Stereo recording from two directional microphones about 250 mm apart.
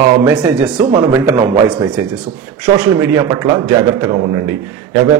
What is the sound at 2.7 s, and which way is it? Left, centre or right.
A man's voice, centre.